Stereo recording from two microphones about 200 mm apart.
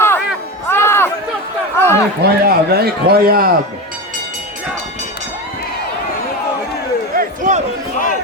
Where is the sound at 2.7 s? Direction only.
50° right (ahead or behind).